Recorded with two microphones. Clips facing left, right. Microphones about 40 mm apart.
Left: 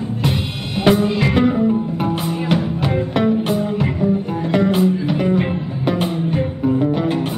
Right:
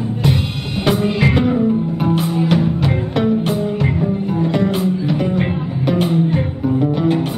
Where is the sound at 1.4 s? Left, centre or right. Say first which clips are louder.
Even; centre.